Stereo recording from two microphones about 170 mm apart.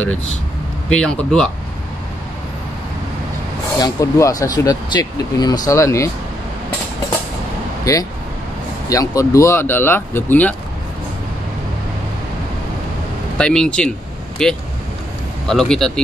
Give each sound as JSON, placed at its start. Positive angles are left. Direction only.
{"t": 0.8, "sound": "speech", "side_deg": 5}
{"t": 3.8, "sound": "speech", "side_deg": 20}
{"t": 7.8, "sound": "speech", "side_deg": 20}
{"t": 13.4, "sound": "speech", "side_deg": 5}